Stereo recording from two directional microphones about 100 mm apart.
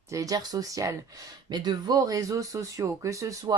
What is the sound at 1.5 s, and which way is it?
Speech, 45° right (ahead or behind).